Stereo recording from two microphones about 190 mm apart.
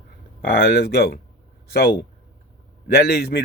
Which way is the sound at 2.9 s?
55° left (ahead or behind).